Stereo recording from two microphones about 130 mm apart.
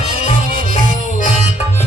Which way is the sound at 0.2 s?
60° left (ahead or behind).